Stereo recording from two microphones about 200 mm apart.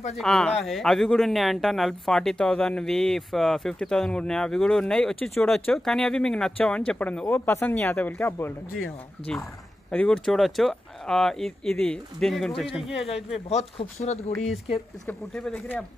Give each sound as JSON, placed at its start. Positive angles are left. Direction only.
{"t": 0.2, "sound": "speech", "side_deg": 5}
{"t": 9.8, "sound": "speech", "side_deg": 5}
{"t": 13.1, "sound": "speech", "side_deg": 30}
{"t": 15.0, "sound": "speech", "side_deg": 5}